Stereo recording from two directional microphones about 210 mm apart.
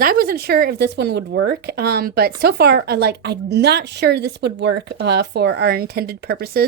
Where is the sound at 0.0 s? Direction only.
45° right (ahead or behind).